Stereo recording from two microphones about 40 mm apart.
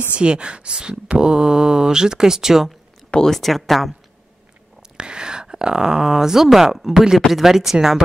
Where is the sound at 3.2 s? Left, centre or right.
Centre.